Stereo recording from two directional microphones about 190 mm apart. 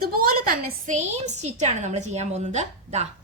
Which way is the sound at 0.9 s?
35° right (ahead or behind).